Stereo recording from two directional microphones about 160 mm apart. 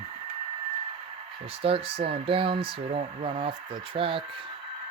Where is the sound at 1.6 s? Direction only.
35° right (ahead or behind).